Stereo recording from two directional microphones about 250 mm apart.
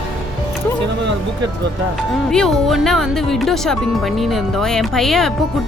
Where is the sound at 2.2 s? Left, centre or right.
Centre.